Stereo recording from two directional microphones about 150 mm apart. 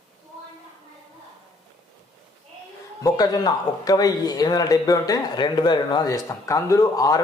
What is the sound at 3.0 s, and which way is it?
Speech, 25° left (ahead or behind).